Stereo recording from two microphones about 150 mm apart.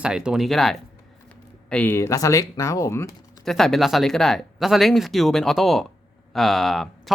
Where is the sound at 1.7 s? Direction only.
15° left (ahead or behind).